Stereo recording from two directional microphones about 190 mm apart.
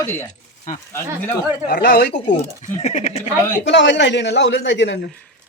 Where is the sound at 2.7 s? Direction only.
35° left (ahead or behind).